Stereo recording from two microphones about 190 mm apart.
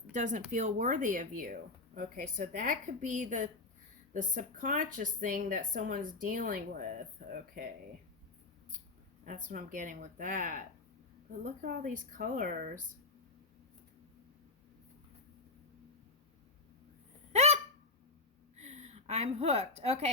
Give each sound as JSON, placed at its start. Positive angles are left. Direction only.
{"t": 0.1, "sound": "speech", "side_deg": -40}
{"t": 9.2, "sound": "speech", "side_deg": -45}
{"t": 17.3, "sound": "a sound", "side_deg": -35}
{"t": 18.5, "sound": "a woman's voice", "side_deg": -35}